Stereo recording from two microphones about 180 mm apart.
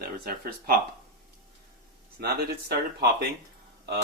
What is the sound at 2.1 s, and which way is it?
Speech, 65° right (ahead or behind).